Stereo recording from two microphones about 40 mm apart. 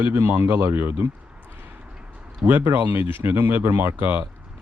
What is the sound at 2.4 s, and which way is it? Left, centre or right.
Speech, right.